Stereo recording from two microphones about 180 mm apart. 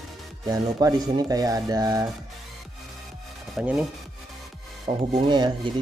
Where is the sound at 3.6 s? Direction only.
5° right (ahead or behind).